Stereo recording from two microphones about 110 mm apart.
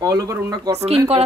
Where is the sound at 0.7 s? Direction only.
70° right (ahead or behind).